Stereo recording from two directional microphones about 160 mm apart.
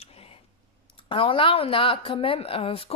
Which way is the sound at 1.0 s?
35° left (ahead or behind).